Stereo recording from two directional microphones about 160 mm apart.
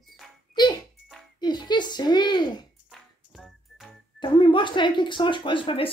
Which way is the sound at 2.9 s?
Centre (ahead or behind).